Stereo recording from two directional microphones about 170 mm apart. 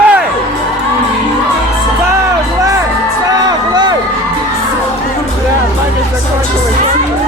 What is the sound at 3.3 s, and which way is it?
Music, 25° right (ahead or behind).